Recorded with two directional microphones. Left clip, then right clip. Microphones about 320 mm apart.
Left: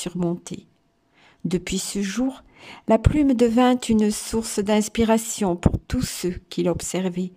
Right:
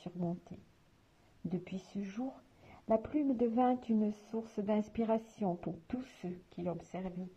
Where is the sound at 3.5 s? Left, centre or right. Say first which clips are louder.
Left 13 dB; centre.